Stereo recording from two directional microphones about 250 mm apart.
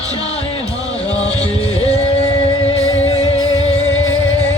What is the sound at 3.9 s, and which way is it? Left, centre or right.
Music, left.